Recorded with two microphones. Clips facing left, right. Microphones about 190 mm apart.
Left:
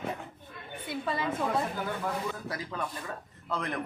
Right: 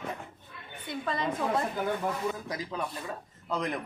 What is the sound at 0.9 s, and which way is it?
Speech, 5° left (ahead or behind).